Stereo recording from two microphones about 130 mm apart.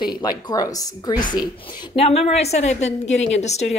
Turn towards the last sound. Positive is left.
turn(degrees=60)  # may be behind; listen again after turning